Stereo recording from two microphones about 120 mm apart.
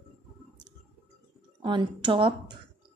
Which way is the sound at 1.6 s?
40° right (ahead or behind).